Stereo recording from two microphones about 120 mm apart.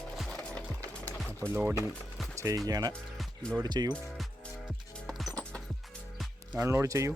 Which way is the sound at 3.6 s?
35° right (ahead or behind).